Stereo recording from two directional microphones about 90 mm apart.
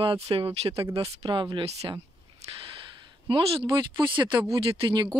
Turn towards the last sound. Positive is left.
turn(degrees=-60)  # may be behind; listen again after turning